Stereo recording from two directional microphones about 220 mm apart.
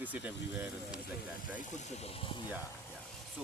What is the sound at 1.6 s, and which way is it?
Speech, 35° left (ahead or behind).